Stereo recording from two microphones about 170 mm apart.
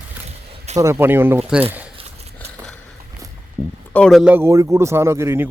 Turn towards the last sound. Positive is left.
turn(degrees=-15)  # may be behind; listen again after turning